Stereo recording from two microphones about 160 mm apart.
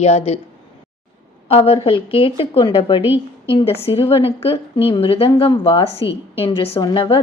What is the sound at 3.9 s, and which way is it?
A woman's voice, 35° left (ahead or behind).